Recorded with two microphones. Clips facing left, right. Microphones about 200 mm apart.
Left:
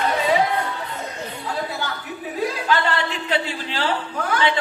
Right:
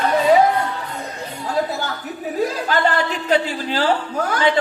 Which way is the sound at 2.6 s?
40° right (ahead or behind).